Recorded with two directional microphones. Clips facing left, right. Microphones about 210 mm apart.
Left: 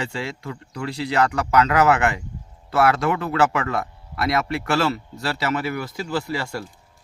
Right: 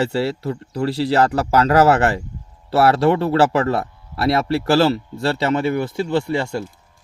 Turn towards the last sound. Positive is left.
turn(degrees=-25)  # may be behind; listen again after turning